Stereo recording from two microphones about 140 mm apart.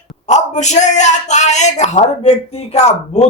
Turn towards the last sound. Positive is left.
turn(degrees=50)  # may be behind; listen again after turning